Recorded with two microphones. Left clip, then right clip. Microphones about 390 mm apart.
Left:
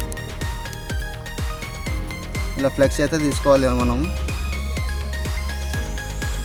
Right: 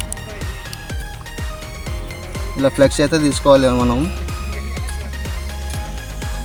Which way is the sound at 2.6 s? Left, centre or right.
Left.